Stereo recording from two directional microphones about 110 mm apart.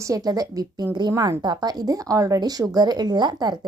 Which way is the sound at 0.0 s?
35° right (ahead or behind).